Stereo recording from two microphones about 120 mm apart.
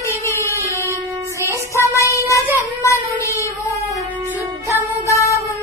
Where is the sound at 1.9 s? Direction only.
25° left (ahead or behind).